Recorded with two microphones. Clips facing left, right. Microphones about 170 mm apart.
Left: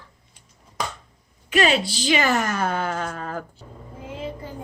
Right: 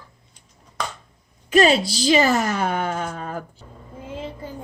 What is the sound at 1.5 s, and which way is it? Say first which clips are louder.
Speech: right 4 dB; 40° right (ahead or behind).